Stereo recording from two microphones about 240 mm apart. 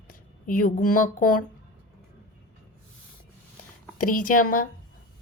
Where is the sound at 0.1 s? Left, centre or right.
Left.